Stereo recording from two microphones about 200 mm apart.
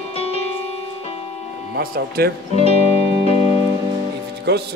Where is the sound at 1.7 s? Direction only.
50° right (ahead or behind).